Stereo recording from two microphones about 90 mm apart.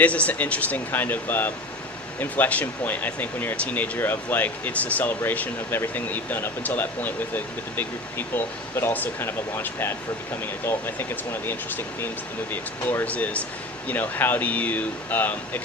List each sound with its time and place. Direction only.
0.0 s speech: 15° left (ahead or behind)
12.9 s speech: 20° left (ahead or behind)